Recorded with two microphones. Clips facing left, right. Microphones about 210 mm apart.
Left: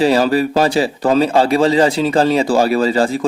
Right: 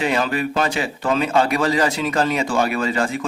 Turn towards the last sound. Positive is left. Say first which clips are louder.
# left 7 dB
turn(degrees=35)  # may be behind; listen again after turning